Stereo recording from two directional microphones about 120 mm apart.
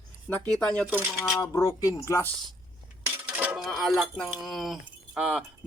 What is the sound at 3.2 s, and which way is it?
Dishes, 15° right (ahead or behind).